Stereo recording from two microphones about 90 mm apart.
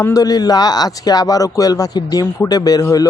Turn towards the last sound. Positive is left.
turn(degrees=40)  # may be behind; listen again after turning